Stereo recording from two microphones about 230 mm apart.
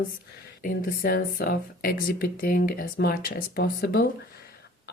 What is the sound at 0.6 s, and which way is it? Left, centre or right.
Speech, left.